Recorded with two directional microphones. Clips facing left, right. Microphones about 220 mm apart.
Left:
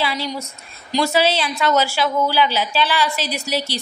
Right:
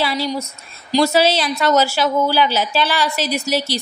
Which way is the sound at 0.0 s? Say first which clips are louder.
Right 3 dB; 35° right (ahead or behind).